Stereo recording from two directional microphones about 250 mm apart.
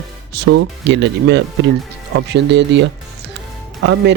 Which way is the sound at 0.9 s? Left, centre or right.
Right.